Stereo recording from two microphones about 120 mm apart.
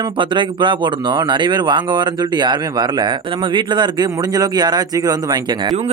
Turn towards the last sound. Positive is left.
turn(degrees=-35)  # may be behind; listen again after turning